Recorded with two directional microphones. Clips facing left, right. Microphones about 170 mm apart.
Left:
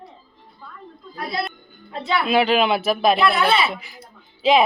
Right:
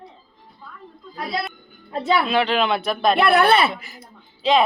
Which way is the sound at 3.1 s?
60° right (ahead or behind).